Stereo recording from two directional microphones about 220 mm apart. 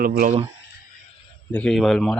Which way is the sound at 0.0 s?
40° right (ahead or behind).